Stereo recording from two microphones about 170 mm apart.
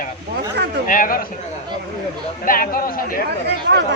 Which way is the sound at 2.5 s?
55° left (ahead or behind).